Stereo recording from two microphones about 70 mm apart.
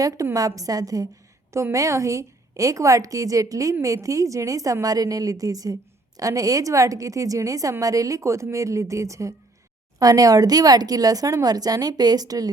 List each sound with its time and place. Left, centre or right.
0.3 s a woman's voice: right
1.7 s a woman's voice: right
10.0 s a woman's voice: right